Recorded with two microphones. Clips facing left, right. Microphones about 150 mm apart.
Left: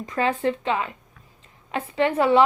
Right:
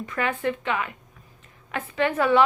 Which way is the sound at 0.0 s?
30° left (ahead or behind).